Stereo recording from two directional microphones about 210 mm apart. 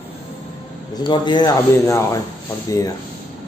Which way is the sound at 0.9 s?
20° left (ahead or behind).